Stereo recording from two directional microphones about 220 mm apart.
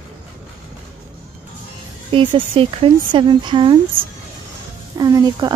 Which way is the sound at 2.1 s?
25° right (ahead or behind).